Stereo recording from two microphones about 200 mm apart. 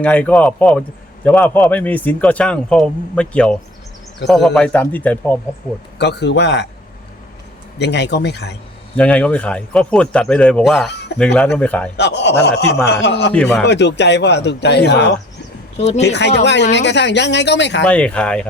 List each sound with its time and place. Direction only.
0.0 s a man's voice: 5° left (ahead or behind)
6.0 s speech: 55° left (ahead or behind)
7.8 s speech: 60° left (ahead or behind)
9.0 s a man's voice: 5° left (ahead or behind)
11.9 s a man's voice: 60° left (ahead or behind)
13.3 s a man's voice: 5° left (ahead or behind)
13.7 s speech: 60° left (ahead or behind)
16.1 s speech: 60° left (ahead or behind)
17.8 s a man's voice: 5° left (ahead or behind)